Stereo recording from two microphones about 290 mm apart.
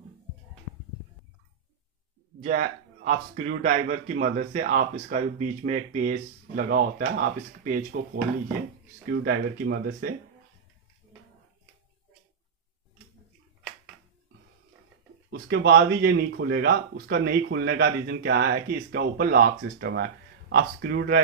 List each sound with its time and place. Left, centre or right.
2.4 s speech: right
9.2 s speech: right
15.2 s speech: right